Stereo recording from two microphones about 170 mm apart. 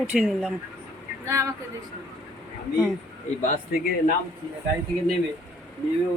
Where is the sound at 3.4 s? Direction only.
50° left (ahead or behind).